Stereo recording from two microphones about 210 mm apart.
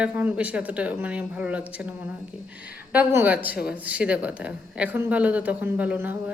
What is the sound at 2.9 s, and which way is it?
A man's voice, 5° right (ahead or behind).